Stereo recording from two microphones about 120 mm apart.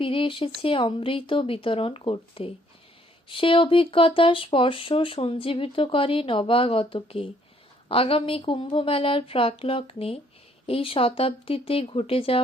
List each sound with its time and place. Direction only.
0.0 s speech: 50° left (ahead or behind)